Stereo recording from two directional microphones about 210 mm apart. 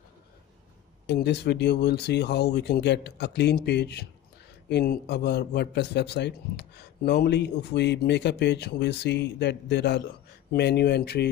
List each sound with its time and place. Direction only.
1.0 s a man's voice: 55° left (ahead or behind)